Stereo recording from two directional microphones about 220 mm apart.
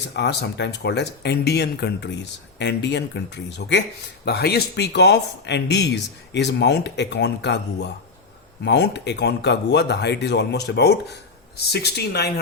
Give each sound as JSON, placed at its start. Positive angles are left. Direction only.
{"t": 0.1, "sound": "speech", "side_deg": 50}